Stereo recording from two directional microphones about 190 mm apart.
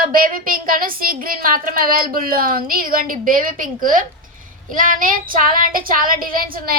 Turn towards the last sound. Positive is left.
turn(degrees=-50)  # may be behind; listen again after turning